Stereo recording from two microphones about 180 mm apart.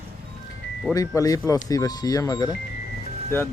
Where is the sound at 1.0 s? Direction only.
20° left (ahead or behind).